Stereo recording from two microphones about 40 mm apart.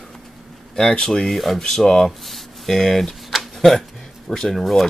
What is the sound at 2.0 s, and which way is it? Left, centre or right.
Speech, centre.